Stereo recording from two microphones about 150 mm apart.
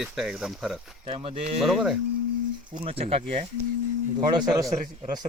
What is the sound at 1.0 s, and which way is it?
Speech, 40° right (ahead or behind).